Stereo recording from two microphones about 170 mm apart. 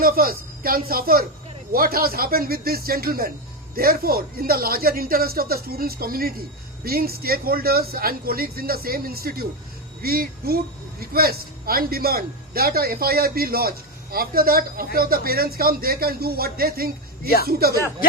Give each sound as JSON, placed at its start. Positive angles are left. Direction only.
{"t": 0.0, "sound": "a man's voice", "side_deg": -60}